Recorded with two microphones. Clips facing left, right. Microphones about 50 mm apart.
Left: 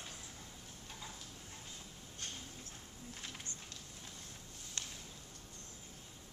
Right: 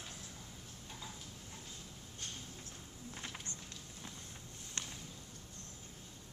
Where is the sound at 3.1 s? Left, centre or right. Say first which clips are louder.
Right 3 dB; centre.